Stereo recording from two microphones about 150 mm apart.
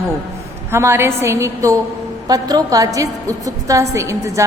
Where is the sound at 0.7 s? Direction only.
15° right (ahead or behind).